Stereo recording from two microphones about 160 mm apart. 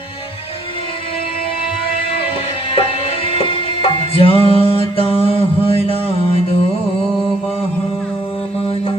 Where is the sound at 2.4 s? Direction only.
35° left (ahead or behind).